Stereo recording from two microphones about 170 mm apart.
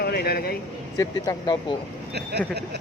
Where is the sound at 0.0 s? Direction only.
65° left (ahead or behind).